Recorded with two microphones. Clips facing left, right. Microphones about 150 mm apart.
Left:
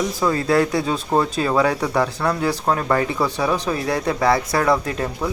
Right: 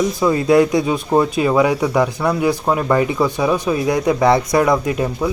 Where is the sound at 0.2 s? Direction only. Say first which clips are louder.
Right 5 dB; 15° right (ahead or behind).